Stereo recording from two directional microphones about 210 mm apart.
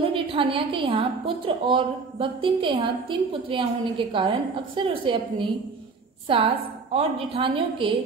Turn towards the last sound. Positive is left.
turn(degrees=-25)  # may be behind; listen again after turning